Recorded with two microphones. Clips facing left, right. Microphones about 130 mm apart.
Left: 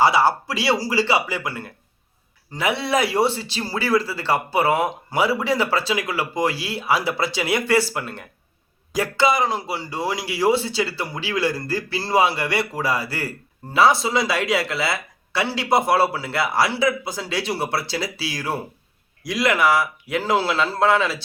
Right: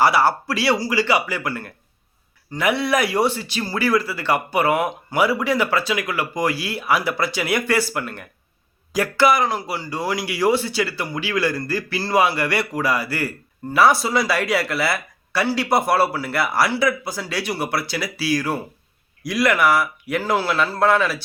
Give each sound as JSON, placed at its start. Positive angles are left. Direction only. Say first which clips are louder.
{"t": 0.0, "sound": "speech", "louder": "even", "side_deg": 20}